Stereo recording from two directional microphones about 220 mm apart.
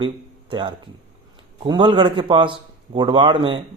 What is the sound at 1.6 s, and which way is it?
A man's voice, 20° right (ahead or behind).